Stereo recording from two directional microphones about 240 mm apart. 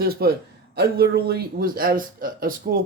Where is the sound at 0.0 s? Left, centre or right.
Right.